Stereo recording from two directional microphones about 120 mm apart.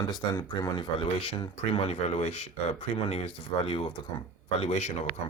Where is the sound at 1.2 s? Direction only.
45° left (ahead or behind).